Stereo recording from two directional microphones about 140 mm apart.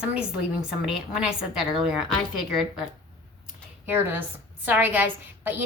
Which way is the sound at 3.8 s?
15° right (ahead or behind).